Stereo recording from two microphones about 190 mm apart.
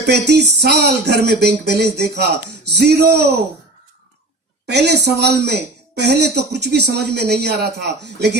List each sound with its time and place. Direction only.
0.0 s speech: 60° right (ahead or behind)
4.6 s a woman's voice: 60° right (ahead or behind)